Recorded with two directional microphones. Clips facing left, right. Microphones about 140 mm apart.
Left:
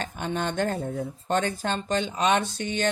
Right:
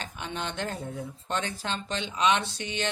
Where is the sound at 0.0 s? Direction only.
45° left (ahead or behind).